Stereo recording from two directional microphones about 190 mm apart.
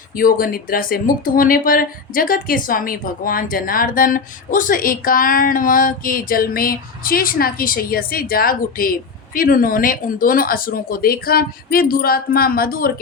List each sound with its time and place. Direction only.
0.2 s speech: 50° left (ahead or behind)